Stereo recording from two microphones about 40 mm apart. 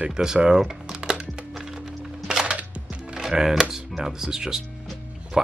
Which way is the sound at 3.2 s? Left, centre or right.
Centre.